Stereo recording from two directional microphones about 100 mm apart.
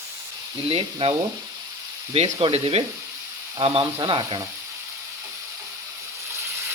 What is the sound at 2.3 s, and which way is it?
Speech, 60° right (ahead or behind).